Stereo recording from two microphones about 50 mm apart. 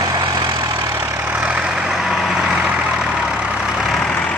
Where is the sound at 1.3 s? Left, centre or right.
Right.